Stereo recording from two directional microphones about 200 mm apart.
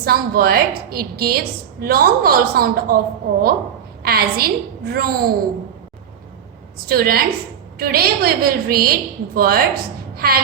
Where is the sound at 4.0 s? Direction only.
50° right (ahead or behind).